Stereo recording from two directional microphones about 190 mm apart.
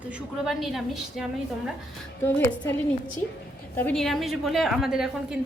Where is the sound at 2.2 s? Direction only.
10° left (ahead or behind).